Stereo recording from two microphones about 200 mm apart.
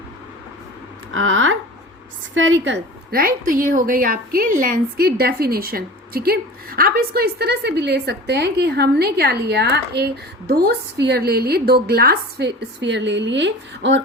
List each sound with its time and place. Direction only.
1.1 s a woman's voice: 75° right (ahead or behind)
3.1 s a woman's voice: 45° right (ahead or behind); by 14.0 s 65° right (ahead or behind)